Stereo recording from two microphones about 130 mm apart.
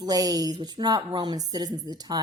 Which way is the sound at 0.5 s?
35° right (ahead or behind).